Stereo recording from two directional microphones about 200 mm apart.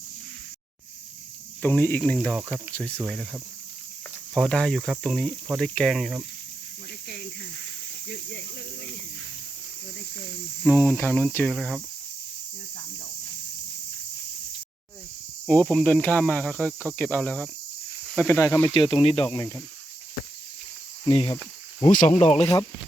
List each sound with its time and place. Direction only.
1.6 s speech: 10° left (ahead or behind)
2.1 s cricket: 5° right (ahead or behind)
2.7 s speech: 5° left (ahead or behind)
3.1 s cricket: centre (ahead or behind)
8.0 s speech: 55° left (ahead or behind)
10.6 s speech: 10° left (ahead or behind)
15.4 s speech: 5° left (ahead or behind)
18.0 s cricket: 5° left (ahead or behind)
18.3 s speech: 10° left (ahead or behind)
18.7 s speech: 25° left (ahead or behind)
19.3 s speech: 15° left (ahead or behind)
21.0 s speech: 25° left (ahead or behind)
21.8 s speech: 40° left (ahead or behind)